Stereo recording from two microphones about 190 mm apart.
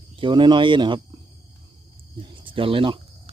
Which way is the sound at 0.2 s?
25° right (ahead or behind).